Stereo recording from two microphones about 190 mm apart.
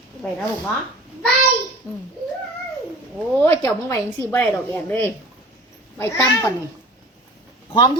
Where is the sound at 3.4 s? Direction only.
15° left (ahead or behind).